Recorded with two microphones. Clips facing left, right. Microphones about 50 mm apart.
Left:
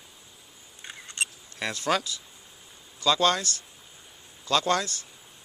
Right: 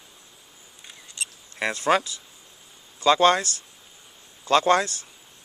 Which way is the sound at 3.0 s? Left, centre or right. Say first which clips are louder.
Right 5 dB; right.